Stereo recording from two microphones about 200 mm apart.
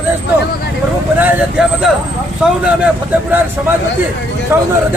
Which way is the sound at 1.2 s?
5° right (ahead or behind).